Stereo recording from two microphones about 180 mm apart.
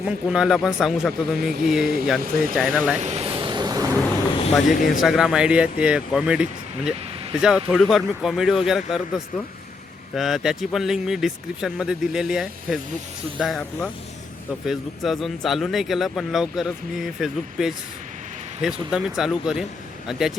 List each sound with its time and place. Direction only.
0.0 s speech: 5° right (ahead or behind)
3.0 s vehicle: 35° right (ahead or behind); by 3.9 s 20° right (ahead or behind)
4.6 s speech: 45° left (ahead or behind)
4.9 s speech: centre (ahead or behind)
14.7 s speech: centre (ahead or behind)